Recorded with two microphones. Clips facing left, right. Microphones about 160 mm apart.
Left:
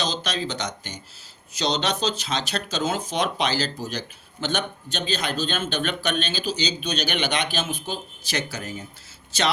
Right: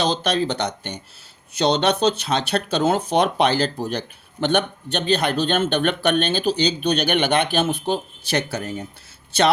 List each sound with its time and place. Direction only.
0.0 s speech: 60° right (ahead or behind)